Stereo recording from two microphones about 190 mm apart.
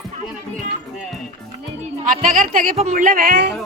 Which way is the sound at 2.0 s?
45° right (ahead or behind).